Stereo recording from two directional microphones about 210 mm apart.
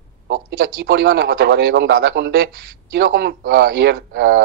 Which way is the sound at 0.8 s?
50° right (ahead or behind).